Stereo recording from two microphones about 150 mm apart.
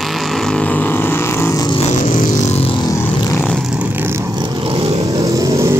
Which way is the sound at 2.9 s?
25° left (ahead or behind).